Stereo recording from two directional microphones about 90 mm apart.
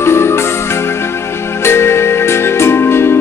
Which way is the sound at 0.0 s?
30° left (ahead or behind).